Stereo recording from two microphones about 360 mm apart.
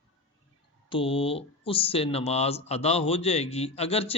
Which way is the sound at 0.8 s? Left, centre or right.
Centre.